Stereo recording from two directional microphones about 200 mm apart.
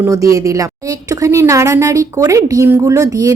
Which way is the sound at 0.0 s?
15° right (ahead or behind).